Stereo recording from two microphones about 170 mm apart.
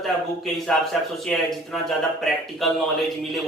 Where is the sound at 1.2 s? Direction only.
Centre (ahead or behind).